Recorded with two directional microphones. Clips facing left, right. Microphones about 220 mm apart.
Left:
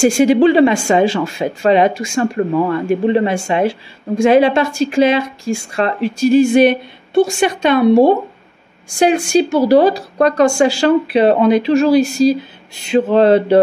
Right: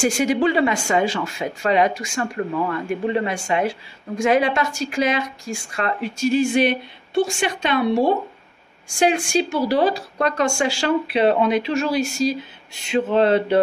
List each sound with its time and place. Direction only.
0.0 s speech: 25° left (ahead or behind)
6.1 s a woman's voice: 40° left (ahead or behind)